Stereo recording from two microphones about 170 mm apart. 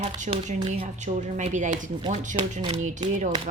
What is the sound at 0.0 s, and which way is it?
A woman's voice, 40° right (ahead or behind).